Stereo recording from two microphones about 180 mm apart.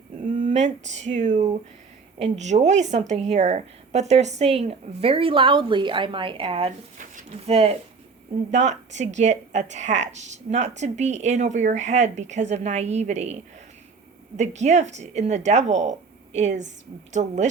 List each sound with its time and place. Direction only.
0.4 s a woman's voice: 40° right (ahead or behind)
7.0 s a woman's voice: 40° right (ahead or behind)